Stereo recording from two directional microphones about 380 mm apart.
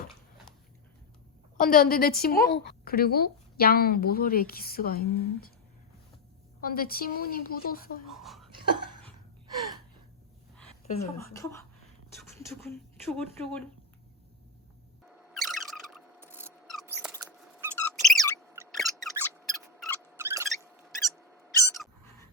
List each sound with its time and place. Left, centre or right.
1.5 s a woman's voice: left
6.6 s a woman's voice: left
8.2 s speech: centre
10.6 s speech: centre
15.0 s a sound: centre
17.6 s squeak: centre